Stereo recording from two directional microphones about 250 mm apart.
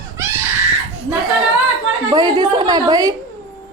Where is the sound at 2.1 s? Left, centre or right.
Centre.